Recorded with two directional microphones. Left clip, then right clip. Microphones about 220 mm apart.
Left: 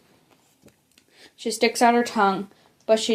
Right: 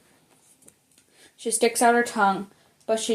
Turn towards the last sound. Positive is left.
turn(degrees=30)  # may be behind; listen again after turning